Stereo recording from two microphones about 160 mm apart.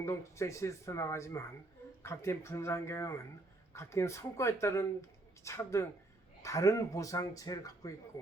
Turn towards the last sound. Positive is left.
turn(degrees=20)  # may be behind; listen again after turning